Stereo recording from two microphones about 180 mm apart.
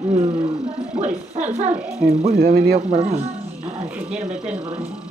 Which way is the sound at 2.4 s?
60° right (ahead or behind).